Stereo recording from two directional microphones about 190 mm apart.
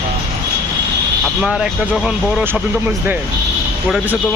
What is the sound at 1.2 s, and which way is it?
A man's voice, 5° right (ahead or behind).